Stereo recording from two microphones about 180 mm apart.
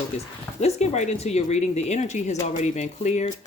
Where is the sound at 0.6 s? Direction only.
40° left (ahead or behind).